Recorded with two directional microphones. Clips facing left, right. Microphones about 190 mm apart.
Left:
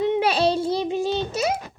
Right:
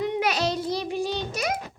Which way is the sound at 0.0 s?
25° left (ahead or behind).